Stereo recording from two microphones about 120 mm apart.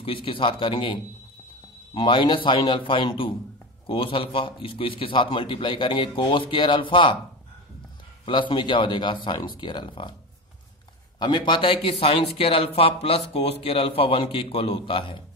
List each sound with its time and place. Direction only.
0.0 s a man's voice: 50° left (ahead or behind)
2.0 s a man's voice: 45° left (ahead or behind)
8.3 s speech: 40° left (ahead or behind)
11.1 s a man's voice: 35° left (ahead or behind)